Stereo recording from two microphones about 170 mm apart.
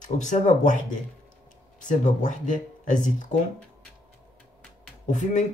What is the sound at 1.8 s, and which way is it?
Speech, 50° left (ahead or behind).